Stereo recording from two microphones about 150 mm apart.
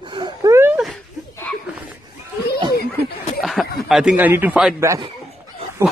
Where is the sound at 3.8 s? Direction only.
Centre (ahead or behind).